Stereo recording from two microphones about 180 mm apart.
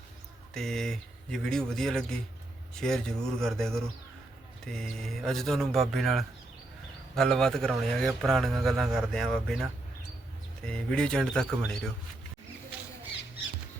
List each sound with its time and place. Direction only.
0.5 s speech: centre (ahead or behind)